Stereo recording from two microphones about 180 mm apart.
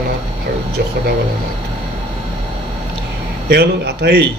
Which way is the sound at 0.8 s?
60° right (ahead or behind).